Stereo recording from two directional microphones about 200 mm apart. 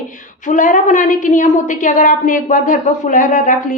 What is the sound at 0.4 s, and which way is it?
A woman's voice, 40° left (ahead or behind).